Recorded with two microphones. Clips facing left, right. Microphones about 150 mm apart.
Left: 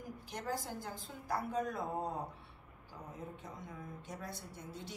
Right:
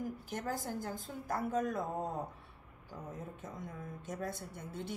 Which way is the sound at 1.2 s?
45° right (ahead or behind).